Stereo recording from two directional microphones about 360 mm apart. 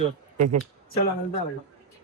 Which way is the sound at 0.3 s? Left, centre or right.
Right.